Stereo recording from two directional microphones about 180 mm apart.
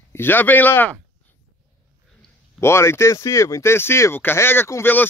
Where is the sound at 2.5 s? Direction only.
15° left (ahead or behind).